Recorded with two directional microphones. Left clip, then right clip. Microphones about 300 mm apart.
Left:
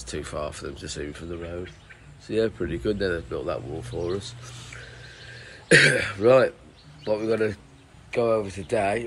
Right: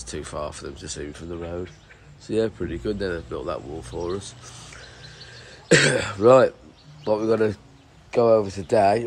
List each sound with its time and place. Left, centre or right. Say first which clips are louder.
0.0 s speech: even; centre